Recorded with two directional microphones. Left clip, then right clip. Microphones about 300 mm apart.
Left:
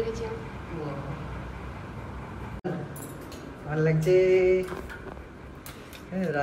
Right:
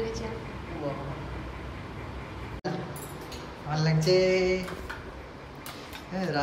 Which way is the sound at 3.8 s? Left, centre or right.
Right.